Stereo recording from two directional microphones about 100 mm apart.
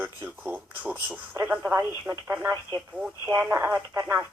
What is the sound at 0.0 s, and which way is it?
Speech, 15° right (ahead or behind).